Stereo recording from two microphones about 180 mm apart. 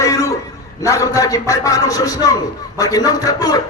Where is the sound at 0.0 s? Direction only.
20° left (ahead or behind).